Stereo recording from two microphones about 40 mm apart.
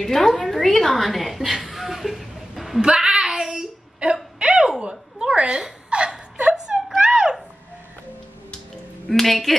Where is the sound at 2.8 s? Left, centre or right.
Centre.